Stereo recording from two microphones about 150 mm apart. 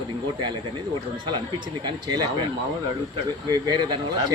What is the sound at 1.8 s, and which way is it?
Speech, 30° right (ahead or behind).